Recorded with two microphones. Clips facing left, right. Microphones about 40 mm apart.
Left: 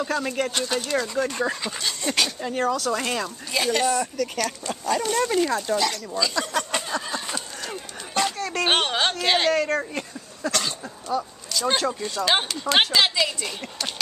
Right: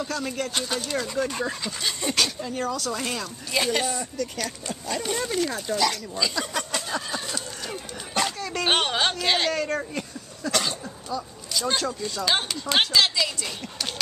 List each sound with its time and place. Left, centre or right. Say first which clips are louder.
0.1 s speech: left 4 dB; centre
0.6 s speech: left 3 dB; centre
1.8 s speech: left 1 dB; centre
2.4 s speech: left 4 dB; left
2.7 s speech: left 4 dB; centre
3.5 s speech: left 3 dB; centre
4.0 s speech: left 4 dB; left
4.6 s speech: left 5 dB; centre
7.6 s a sound: even; centre
9.8 s speech: left 2 dB; centre
11.1 s speech: left 6 dB; left
11.6 s speech: left 3 dB; centre